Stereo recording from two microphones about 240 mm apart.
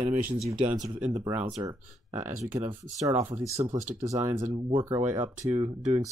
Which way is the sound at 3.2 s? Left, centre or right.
Centre.